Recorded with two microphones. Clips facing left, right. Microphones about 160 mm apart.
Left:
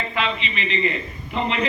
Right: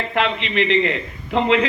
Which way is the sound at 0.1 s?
65° right (ahead or behind).